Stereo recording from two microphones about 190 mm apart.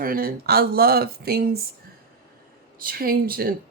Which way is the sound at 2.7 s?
50° right (ahead or behind).